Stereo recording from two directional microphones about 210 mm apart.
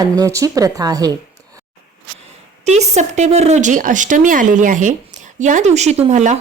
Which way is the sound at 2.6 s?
30° right (ahead or behind).